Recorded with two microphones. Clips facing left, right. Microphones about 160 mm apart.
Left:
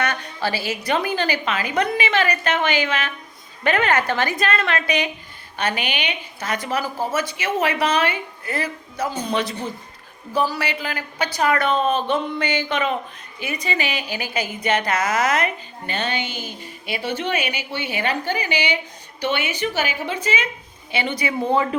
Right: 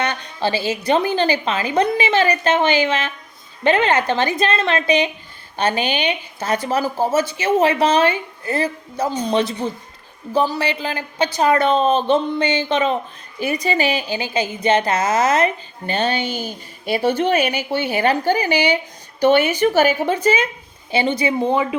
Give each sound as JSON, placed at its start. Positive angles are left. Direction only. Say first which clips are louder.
{"t": 0.0, "sound": "a woman's voice", "louder": "right 2 dB", "side_deg": -25}